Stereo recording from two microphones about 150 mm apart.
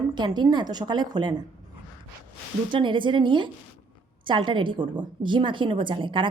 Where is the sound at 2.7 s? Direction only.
35° right (ahead or behind).